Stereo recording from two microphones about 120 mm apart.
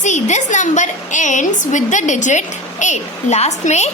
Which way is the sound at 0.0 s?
80° left.